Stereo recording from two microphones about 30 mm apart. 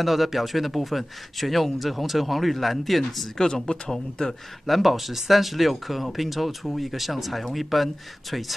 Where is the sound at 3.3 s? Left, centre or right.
Centre.